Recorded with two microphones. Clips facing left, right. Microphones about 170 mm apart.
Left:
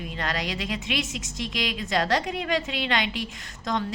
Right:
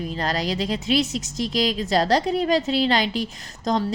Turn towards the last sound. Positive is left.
turn(degrees=-35)  # may be behind; listen again after turning